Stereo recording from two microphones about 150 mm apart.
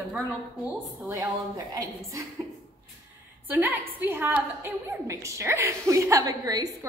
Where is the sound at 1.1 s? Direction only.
20° right (ahead or behind).